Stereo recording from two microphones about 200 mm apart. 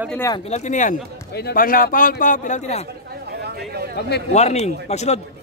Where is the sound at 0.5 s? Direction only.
35° left (ahead or behind).